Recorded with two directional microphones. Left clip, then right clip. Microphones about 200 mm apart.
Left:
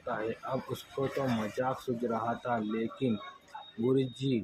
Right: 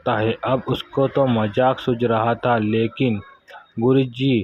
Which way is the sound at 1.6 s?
35° right (ahead or behind).